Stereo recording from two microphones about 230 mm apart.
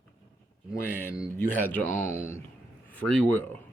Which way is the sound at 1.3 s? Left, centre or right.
Centre.